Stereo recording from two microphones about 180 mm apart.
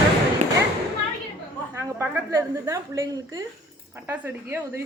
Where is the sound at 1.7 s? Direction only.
15° right (ahead or behind).